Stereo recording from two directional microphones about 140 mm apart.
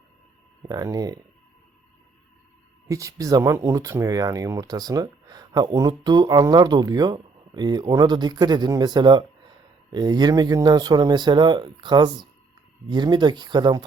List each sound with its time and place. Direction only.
0.7 s speech: 30° right (ahead or behind)
2.8 s speech: 25° right (ahead or behind)